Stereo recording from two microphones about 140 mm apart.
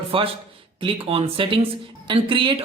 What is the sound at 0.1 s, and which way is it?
Speech, 40° right (ahead or behind).